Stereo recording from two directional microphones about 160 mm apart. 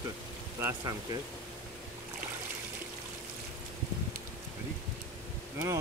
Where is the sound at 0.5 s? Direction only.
20° right (ahead or behind).